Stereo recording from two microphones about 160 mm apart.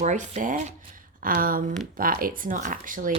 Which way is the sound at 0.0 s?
50° right (ahead or behind).